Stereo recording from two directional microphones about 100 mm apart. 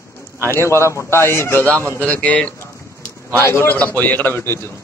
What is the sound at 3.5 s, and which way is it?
A man's voice, 25° left (ahead or behind).